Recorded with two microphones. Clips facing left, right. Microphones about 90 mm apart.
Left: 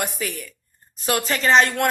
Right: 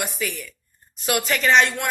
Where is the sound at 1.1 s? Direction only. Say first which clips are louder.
Left 1 dB; 35° left (ahead or behind).